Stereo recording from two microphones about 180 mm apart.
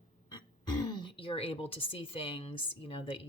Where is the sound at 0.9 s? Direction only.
25° left (ahead or behind).